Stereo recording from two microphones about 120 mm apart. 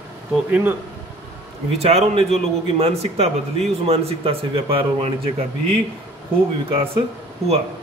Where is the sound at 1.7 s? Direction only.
60° right (ahead or behind).